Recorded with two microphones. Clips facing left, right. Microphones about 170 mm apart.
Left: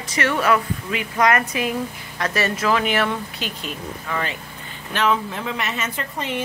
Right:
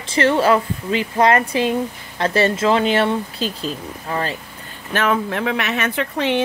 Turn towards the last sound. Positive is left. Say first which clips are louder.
# right 7 dB
turn(degrees=-75)  # may be behind; listen again after turning